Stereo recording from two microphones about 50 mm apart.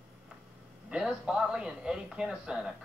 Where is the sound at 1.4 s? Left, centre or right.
Centre.